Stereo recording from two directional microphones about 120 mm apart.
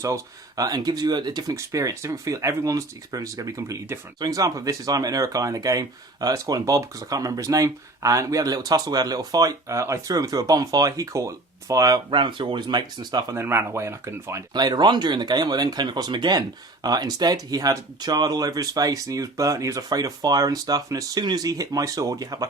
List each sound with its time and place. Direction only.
0.0 s speech: 30° right (ahead or behind)
12.1 s speech: 45° right (ahead or behind)
13.3 s speech: 20° right (ahead or behind)
14.5 s speech: 35° right (ahead or behind)